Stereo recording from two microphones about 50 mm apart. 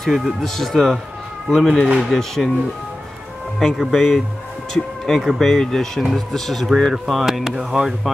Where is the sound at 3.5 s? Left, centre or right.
Centre.